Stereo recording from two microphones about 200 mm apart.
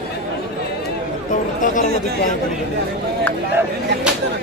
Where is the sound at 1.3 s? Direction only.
40° left (ahead or behind).